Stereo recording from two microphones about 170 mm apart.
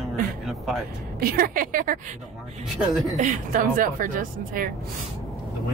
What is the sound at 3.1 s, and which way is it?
A woman's voice, 50° right (ahead or behind).